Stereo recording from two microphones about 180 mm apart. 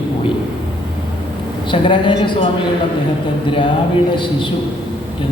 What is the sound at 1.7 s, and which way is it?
Speech, 30° left (ahead or behind).